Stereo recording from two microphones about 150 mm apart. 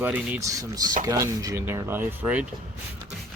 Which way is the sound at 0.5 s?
25° right (ahead or behind).